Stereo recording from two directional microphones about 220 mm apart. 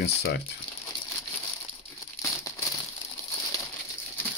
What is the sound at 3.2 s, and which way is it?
Crumpling, 10° left (ahead or behind).